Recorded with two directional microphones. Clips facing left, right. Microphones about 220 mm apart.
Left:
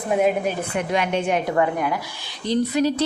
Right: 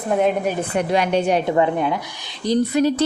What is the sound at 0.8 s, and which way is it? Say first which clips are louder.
Speech: right 4 dB; 35° right (ahead or behind).